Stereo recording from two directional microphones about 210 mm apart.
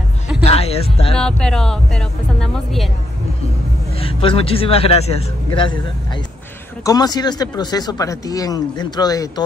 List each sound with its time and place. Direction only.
0.4 s music: 30° left (ahead or behind)
1.1 s speech: 5° left (ahead or behind)
4.0 s speech: 25° left (ahead or behind)
6.8 s speech: 20° left (ahead or behind)